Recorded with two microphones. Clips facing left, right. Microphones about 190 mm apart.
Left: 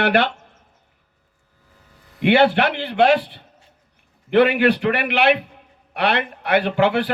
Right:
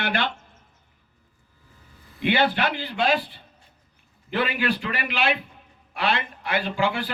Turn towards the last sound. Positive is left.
turn(degrees=65)  # may be behind; listen again after turning